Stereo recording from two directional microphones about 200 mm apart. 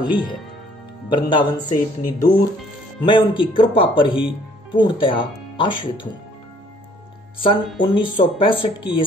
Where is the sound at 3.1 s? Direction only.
25° left (ahead or behind).